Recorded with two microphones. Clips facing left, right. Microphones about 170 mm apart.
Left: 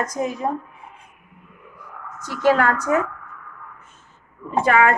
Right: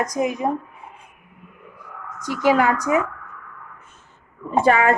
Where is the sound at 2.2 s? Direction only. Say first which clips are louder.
Even; 15° right (ahead or behind).